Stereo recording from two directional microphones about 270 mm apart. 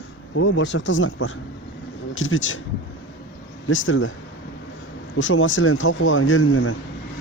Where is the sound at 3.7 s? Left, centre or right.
Left.